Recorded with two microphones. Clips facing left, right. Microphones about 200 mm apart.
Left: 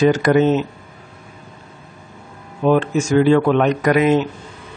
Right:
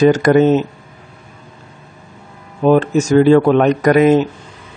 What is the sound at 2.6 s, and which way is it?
Speech, 40° right (ahead or behind).